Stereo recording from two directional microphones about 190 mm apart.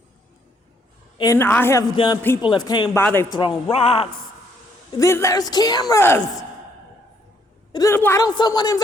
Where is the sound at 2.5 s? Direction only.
25° left (ahead or behind).